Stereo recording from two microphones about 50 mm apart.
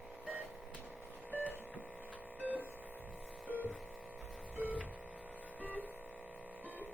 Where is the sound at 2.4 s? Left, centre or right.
Right.